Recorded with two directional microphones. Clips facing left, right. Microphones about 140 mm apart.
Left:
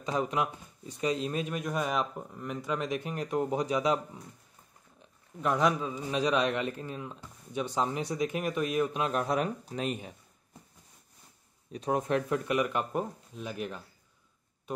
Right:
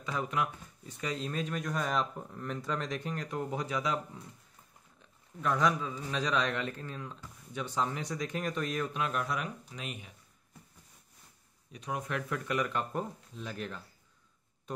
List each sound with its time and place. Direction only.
0.0 s speech: 20° left (ahead or behind)
5.4 s speech: 20° left (ahead or behind); by 10.1 s 35° left (ahead or behind)
11.7 s speech: 35° left (ahead or behind); by 13.8 s 15° left (ahead or behind)